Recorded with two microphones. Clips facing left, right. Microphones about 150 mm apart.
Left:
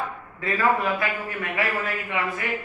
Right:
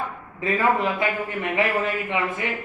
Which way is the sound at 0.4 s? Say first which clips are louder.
Right 1 dB; 20° right (ahead or behind).